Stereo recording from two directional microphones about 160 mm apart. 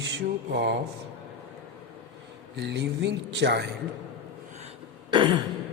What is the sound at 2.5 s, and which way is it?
Speech, 90° right.